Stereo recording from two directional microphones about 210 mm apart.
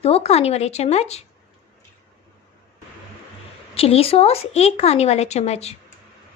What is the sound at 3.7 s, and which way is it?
Speech, 30° left (ahead or behind).